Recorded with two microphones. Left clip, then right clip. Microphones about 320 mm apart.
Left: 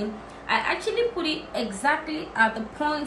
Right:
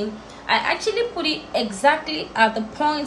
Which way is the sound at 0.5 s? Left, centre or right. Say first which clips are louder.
Right 4 dB; centre.